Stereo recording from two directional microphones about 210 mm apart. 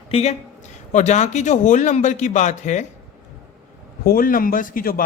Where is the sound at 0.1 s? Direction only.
30° left (ahead or behind).